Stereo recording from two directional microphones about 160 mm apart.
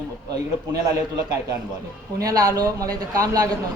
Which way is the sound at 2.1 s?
20° right (ahead or behind).